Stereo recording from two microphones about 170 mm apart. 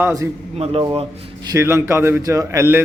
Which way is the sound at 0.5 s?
35° right (ahead or behind).